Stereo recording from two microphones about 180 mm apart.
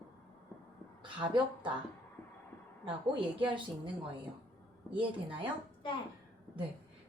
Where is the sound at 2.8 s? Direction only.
30° right (ahead or behind).